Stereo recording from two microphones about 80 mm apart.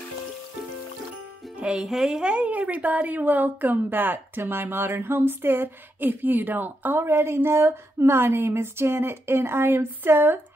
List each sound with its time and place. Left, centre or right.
1.6 s a woman's voice: centre; by 10.4 s right